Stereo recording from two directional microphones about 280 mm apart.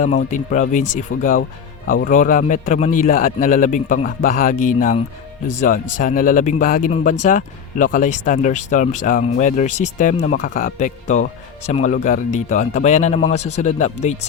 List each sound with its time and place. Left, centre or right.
0.3 s speech: left